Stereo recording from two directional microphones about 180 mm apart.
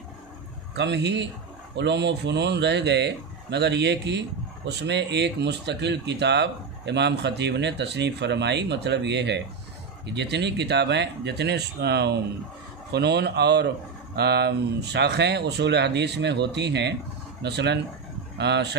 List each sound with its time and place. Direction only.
0.7 s speech: 75° right (ahead or behind)